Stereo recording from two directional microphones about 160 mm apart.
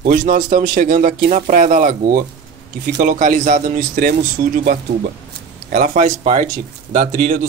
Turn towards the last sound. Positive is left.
turn(degrees=-55)  # may be behind; listen again after turning